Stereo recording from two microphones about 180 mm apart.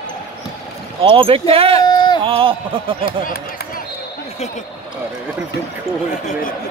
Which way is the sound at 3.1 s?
50° left (ahead or behind).